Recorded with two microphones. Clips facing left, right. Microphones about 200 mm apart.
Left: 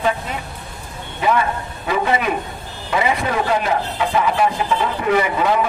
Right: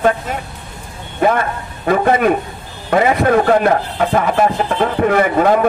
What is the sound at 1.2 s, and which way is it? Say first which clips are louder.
Speech: right 3 dB; 50° right (ahead or behind).